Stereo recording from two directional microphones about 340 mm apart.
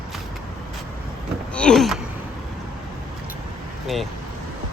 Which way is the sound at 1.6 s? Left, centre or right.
Centre.